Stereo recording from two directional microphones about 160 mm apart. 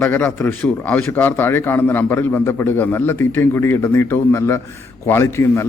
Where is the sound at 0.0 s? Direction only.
10° left (ahead or behind).